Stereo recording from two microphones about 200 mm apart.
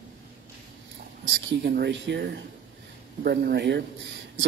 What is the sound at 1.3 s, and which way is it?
Speech, 60° right (ahead or behind).